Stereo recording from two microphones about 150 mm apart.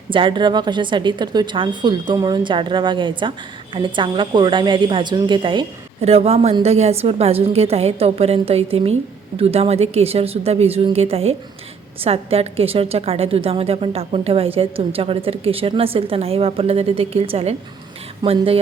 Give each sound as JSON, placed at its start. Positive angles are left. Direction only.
{"t": 0.1, "sound": "a woman's voice", "side_deg": -35}